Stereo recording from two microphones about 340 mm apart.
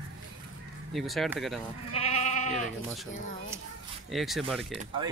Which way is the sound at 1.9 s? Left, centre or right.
Centre.